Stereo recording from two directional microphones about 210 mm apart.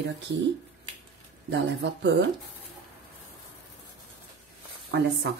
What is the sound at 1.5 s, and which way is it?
Speech, 55° right (ahead or behind).